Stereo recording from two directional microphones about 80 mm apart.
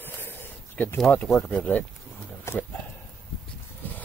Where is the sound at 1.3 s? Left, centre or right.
Centre.